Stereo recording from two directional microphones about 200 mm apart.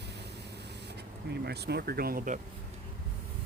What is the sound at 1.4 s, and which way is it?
Speech, 55° right (ahead or behind).